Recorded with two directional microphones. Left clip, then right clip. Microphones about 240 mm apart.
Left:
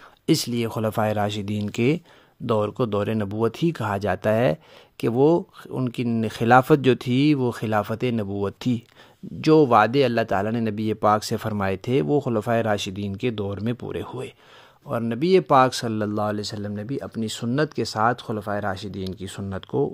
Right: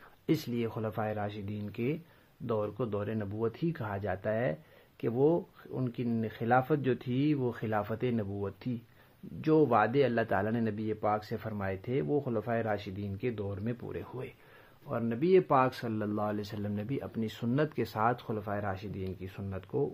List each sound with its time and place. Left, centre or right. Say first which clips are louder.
0.3 s speech: left 9 dB; left